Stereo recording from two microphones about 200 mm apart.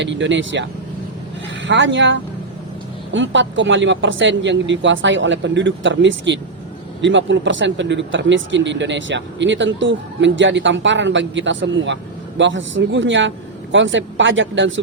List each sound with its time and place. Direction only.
0.0 s speech: 65° right (ahead or behind)
1.6 s a man's voice: 65° right (ahead or behind)